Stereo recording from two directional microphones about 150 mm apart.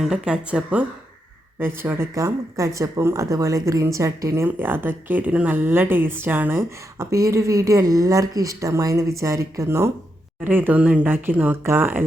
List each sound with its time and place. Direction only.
0.0 s speech: 5° right (ahead or behind)